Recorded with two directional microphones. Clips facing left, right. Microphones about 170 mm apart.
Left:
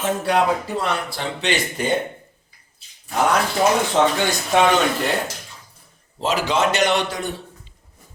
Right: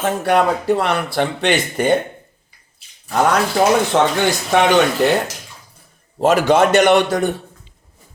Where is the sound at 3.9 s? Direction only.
55° right (ahead or behind).